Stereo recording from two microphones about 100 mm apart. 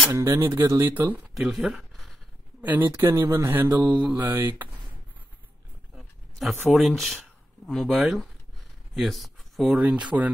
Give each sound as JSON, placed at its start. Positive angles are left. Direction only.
{"t": 0.1, "sound": "speech", "side_deg": -30}
{"t": 1.3, "sound": "a sound", "side_deg": -5}
{"t": 2.6, "sound": "speech", "side_deg": -20}
{"t": 5.9, "sound": "speech", "side_deg": 0}
{"t": 8.9, "sound": "a sound", "side_deg": 0}
{"t": 10.1, "sound": "speech", "side_deg": -20}